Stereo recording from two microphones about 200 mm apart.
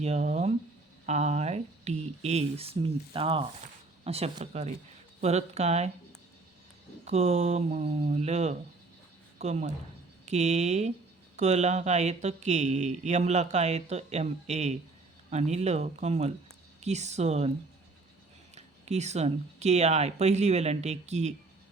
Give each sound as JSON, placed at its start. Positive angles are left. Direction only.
{"t": 0.0, "sound": "speech", "side_deg": -35}
{"t": 7.0, "sound": "speech", "side_deg": -35}
{"t": 18.5, "sound": "speech", "side_deg": -35}